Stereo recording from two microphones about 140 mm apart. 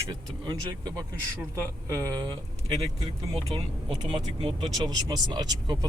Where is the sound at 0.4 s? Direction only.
30° right (ahead or behind).